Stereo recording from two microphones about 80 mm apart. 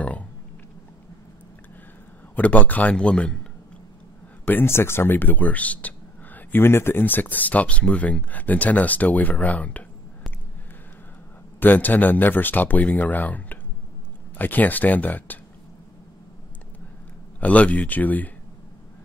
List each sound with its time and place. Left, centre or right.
0.0 s a sound: centre
2.3 s a man's voice: centre
4.5 s speech: left
11.6 s speech: left
17.4 s speech: centre